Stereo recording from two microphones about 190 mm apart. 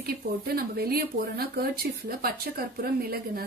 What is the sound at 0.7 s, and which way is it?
Speech, 55° right (ahead or behind).